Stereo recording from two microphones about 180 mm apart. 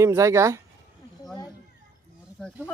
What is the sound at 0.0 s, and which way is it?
Speech, 15° right (ahead or behind).